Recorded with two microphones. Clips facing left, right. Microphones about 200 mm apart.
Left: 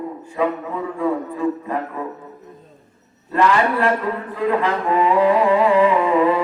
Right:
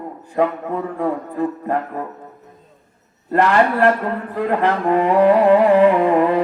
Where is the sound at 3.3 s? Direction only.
55° right (ahead or behind).